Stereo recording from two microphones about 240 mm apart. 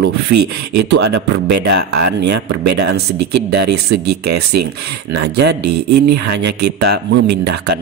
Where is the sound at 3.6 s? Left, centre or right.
Right.